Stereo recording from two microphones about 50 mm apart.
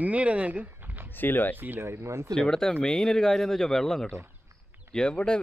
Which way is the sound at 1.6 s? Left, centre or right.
Right.